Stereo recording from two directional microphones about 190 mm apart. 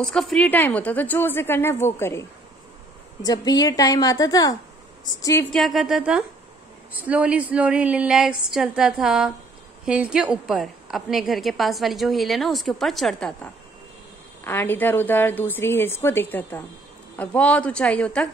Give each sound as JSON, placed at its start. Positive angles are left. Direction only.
{"t": 0.0, "sound": "a woman's voice", "side_deg": 0}
{"t": 3.3, "sound": "a woman's voice", "side_deg": 20}
{"t": 5.6, "sound": "a woman's voice", "side_deg": 0}